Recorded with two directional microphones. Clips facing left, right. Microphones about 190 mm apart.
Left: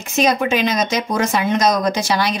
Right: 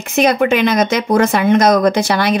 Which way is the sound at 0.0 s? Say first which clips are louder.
Right 4 dB; 60° right (ahead or behind).